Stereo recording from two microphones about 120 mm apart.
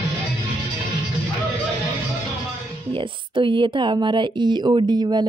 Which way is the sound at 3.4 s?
45° right (ahead or behind).